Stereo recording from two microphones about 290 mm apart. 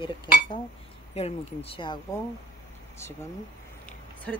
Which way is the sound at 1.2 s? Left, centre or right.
Centre.